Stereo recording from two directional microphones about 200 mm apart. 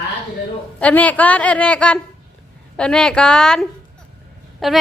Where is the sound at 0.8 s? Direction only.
10° left (ahead or behind).